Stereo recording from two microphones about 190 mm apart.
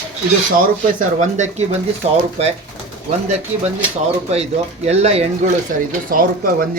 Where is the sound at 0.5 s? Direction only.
45° right (ahead or behind).